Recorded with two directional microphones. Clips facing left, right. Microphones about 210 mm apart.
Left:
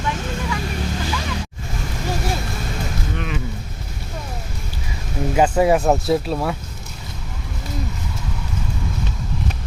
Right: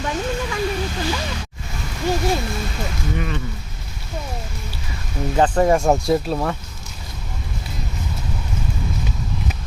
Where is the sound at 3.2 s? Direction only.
5° left (ahead or behind).